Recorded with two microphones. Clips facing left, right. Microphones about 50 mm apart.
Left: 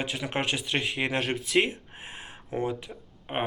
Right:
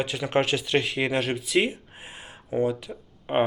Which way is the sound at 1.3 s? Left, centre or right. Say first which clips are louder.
Right 1 dB; left.